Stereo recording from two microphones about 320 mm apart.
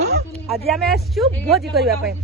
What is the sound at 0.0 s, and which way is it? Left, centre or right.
Bow-wow, right.